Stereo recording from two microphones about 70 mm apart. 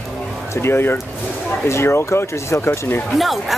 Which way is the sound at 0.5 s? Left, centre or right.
Left.